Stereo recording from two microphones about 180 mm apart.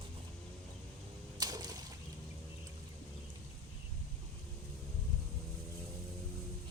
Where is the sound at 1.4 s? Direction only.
20° right (ahead or behind).